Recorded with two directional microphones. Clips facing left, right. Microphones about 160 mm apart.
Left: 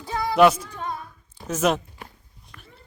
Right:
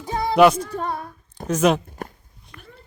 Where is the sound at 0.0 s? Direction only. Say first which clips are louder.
Right 3 dB; 20° right (ahead or behind).